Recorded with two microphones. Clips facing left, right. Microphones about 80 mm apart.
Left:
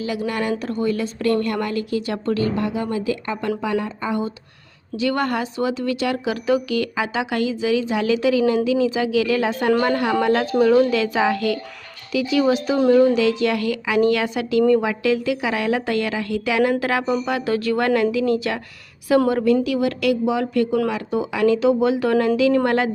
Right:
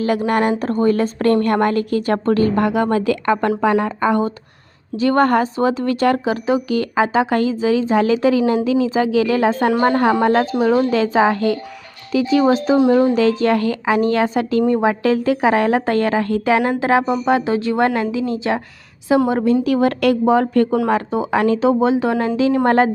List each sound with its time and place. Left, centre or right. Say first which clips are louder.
0.0 s a woman's voice: right 7 dB; right
2.6 s a woman's voice: right 7 dB; right
4.9 s a woman's voice: right 7 dB; right
19.6 s speech: right 4 dB; right